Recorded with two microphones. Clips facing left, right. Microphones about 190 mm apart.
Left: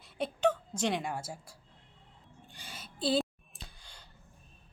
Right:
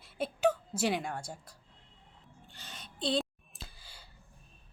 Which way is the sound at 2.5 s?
10° left (ahead or behind).